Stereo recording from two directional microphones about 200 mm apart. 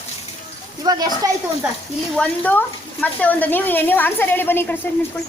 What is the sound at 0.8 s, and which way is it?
Speech, 20° right (ahead or behind).